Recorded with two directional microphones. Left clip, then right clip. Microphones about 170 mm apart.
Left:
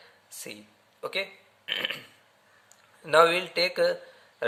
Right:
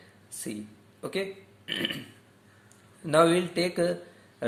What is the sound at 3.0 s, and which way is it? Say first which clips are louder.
Speech: left 2 dB; 30° left (ahead or behind).